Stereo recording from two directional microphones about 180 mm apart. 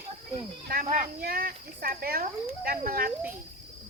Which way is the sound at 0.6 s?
50° right (ahead or behind).